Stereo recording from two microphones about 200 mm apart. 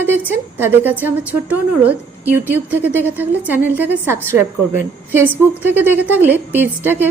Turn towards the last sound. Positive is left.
turn(degrees=-10)  # may be behind; listen again after turning